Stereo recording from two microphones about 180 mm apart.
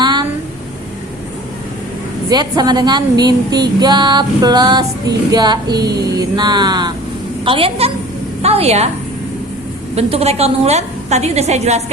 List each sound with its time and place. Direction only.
0.0 s a sound: 25° right (ahead or behind)
2.3 s female singing: 20° right (ahead or behind)
7.4 s a woman's voice: 30° right (ahead or behind)
9.9 s a woman's voice: 35° right (ahead or behind)